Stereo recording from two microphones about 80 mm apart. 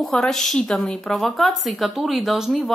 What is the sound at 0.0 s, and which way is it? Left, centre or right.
A woman's voice, centre.